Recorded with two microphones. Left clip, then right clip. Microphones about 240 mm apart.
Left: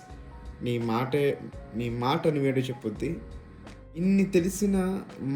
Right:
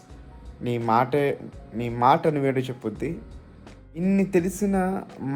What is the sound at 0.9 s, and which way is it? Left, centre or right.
Speech, centre.